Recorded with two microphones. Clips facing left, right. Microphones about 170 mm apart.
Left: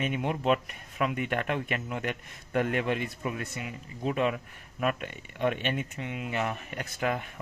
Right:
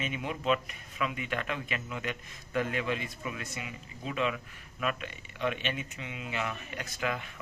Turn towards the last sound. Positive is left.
turn(degrees=50)  # may be behind; listen again after turning